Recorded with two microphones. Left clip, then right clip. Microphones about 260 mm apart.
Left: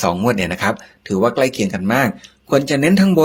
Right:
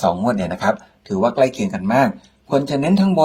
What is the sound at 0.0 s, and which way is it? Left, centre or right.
Speech, left.